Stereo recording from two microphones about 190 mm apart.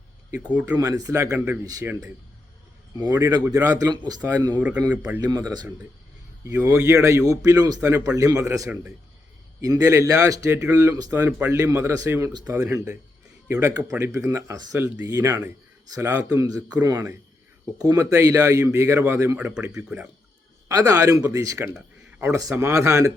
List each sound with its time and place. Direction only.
0.8 s a man's voice: 20° right (ahead or behind)